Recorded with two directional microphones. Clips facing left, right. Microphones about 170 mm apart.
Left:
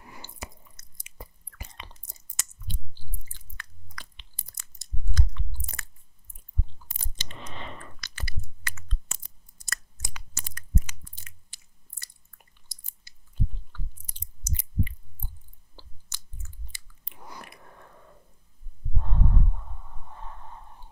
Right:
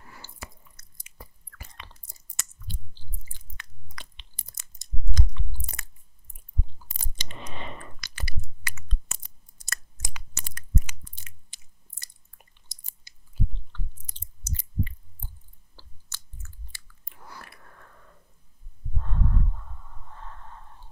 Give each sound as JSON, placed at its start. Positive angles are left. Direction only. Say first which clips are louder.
{"t": 0.0, "sound": "chewing", "louder": "left 2 dB", "side_deg": 15}
{"t": 3.3, "sound": "biting", "louder": "left 1 dB", "side_deg": -20}
{"t": 7.0, "sound": "a sound", "louder": "right 1 dB", "side_deg": -15}
{"t": 9.7, "sound": "biting", "louder": "even", "side_deg": -20}
{"t": 12.7, "sound": "chewing", "louder": "right 1 dB", "side_deg": -20}
{"t": 13.7, "sound": "chewing", "louder": "right 1 dB", "side_deg": 10}
{"t": 17.1, "sound": "a sound", "louder": "left 2 dB", "side_deg": 15}
{"t": 18.9, "sound": "snort", "louder": "left 1 dB", "side_deg": 15}